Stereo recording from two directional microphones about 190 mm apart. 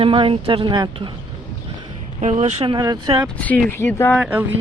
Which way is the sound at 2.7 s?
20° right (ahead or behind).